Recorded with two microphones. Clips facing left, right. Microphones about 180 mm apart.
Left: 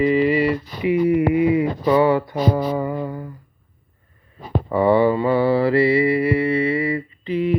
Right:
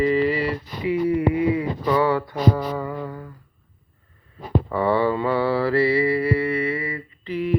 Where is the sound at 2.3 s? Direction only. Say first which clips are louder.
Left 1 dB; 5° left (ahead or behind).